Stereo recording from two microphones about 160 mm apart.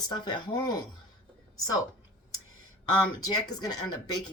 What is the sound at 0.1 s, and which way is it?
A woman's voice, 25° left (ahead or behind).